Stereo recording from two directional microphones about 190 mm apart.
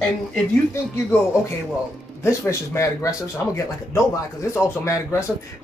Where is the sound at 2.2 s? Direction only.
10° left (ahead or behind).